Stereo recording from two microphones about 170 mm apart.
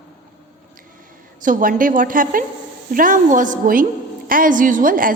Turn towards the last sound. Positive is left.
turn(degrees=-55)  # may be behind; listen again after turning